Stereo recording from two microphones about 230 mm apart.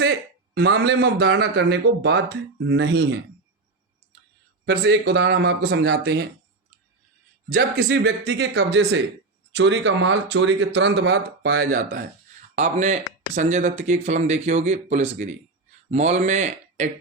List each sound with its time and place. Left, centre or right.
0.0 s a man's voice: right
4.6 s a man's voice: right
7.5 s a man's voice: right